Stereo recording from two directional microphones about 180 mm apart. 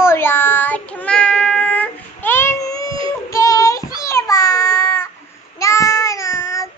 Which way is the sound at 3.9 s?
15° left (ahead or behind).